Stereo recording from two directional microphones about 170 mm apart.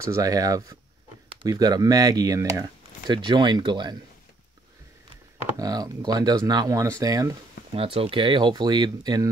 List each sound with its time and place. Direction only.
0.0 s speech: 20° right (ahead or behind)
5.6 s speech: 20° right (ahead or behind)
7.7 s speech: 35° right (ahead or behind)